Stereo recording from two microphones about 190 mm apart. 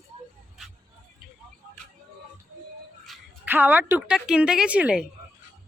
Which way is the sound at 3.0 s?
5° right (ahead or behind).